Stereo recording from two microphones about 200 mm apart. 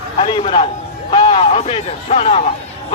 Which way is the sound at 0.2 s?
25° left (ahead or behind).